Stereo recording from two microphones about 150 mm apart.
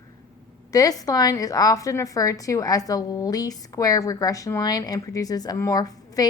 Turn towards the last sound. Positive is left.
turn(degrees=25)  # may be behind; listen again after turning